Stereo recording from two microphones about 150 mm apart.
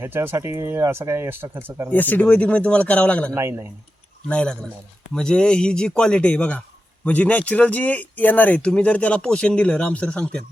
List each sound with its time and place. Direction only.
0.0 s speech: 15° right (ahead or behind)
1.9 s speech: 10° left (ahead or behind)
3.3 s speech: 15° right (ahead or behind)
4.3 s speech: 5° left (ahead or behind)